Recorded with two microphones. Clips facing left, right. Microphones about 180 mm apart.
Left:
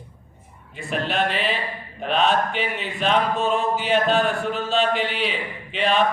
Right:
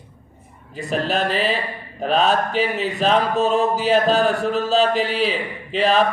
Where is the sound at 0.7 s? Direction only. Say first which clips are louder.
Right 4 dB; 40° right (ahead or behind).